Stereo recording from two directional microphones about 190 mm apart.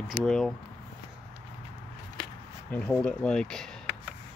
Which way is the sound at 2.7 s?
10° left (ahead or behind).